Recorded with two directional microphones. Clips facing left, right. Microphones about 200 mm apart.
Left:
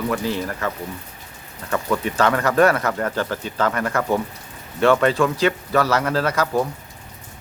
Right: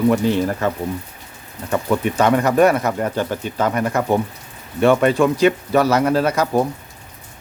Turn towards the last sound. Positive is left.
turn(degrees=-20)  # may be behind; listen again after turning